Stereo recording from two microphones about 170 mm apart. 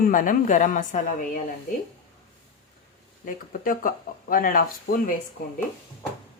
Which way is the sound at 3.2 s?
55° left (ahead or behind).